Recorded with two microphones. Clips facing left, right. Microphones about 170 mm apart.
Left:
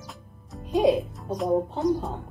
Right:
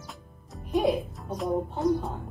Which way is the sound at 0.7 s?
20° left (ahead or behind).